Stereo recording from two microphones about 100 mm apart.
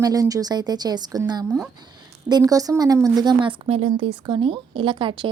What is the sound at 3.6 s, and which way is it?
Speech, 75° right (ahead or behind).